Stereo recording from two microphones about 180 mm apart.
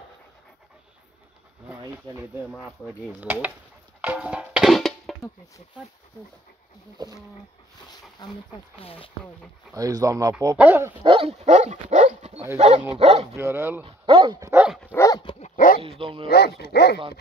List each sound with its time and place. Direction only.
3.1 s speech: 10° right (ahead or behind)
4.0 s music: 5° right (ahead or behind)
8.2 s speech: 20° left (ahead or behind)
9.8 s speech: 20° right (ahead or behind)
11.1 s speech: 30° right (ahead or behind)
13.4 s speech: 15° right (ahead or behind)
13.8 s speech: 30° right (ahead or behind)
14.9 s dog: 20° left (ahead or behind)
15.4 s dog: 50° left (ahead or behind)
15.8 s speech: 30° right (ahead or behind)
16.3 s speech: 65° left (ahead or behind)